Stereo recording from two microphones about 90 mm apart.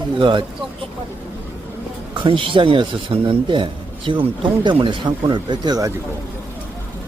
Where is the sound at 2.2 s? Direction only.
75° right (ahead or behind).